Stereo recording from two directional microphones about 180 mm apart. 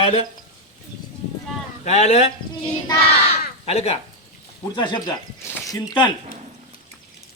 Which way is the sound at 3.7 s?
35° left (ahead or behind).